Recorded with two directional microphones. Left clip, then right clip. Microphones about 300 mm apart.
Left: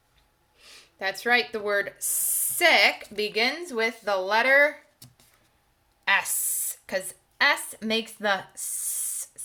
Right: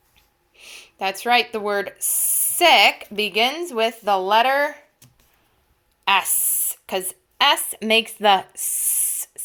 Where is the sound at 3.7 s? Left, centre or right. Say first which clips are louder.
Right 6 dB; centre.